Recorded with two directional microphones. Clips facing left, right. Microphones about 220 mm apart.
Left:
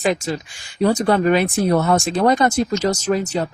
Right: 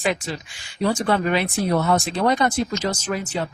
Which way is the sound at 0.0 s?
40° left (ahead or behind).